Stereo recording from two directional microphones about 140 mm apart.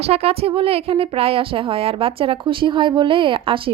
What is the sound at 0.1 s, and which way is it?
A woman's voice, 45° right (ahead or behind).